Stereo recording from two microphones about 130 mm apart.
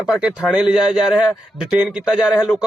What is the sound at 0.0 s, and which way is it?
Speech, 5° right (ahead or behind).